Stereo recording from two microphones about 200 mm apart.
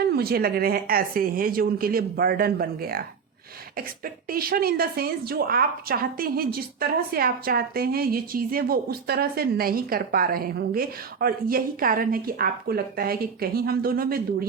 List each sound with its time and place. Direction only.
0.1 s a woman's voice: 50° right (ahead or behind)